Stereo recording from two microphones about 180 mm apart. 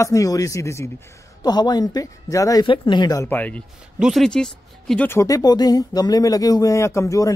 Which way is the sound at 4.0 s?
Centre (ahead or behind).